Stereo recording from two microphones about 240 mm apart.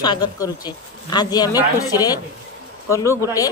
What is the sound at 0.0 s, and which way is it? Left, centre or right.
A woman's voice, centre.